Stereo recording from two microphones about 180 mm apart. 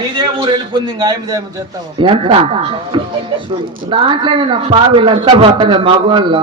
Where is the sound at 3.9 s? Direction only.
25° right (ahead or behind).